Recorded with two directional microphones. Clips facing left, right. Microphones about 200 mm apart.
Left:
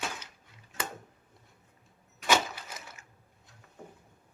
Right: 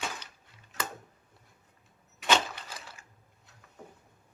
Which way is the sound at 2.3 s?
10° left (ahead or behind).